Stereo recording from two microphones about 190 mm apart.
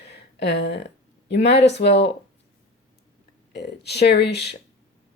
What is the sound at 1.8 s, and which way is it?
Speech, 50° left (ahead or behind).